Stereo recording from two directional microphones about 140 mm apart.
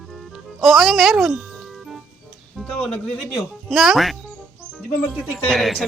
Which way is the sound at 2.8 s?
5° left (ahead or behind).